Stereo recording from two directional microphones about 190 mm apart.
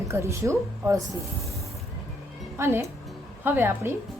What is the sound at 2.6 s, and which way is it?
Speech, 10° right (ahead or behind).